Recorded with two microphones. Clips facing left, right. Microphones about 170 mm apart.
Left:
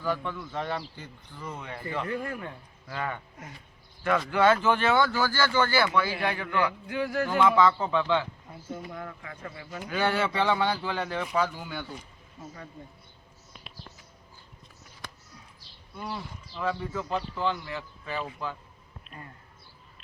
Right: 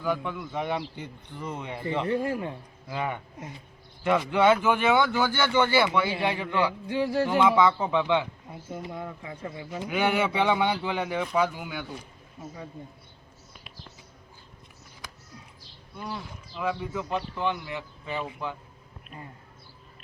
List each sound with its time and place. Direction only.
0.0 s speech: 10° right (ahead or behind); by 2.6 s 25° right (ahead or behind)
2.9 s speech: 15° right (ahead or behind)
7.3 s speech: 15° right (ahead or behind)
16.0 s speech: centre (ahead or behind)
16.6 s speech: 15° right (ahead or behind)